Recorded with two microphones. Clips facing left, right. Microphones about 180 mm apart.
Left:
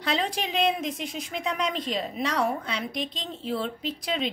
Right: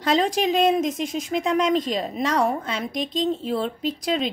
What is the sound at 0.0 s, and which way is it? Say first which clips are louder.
Speech: right 7 dB; 45° right (ahead or behind).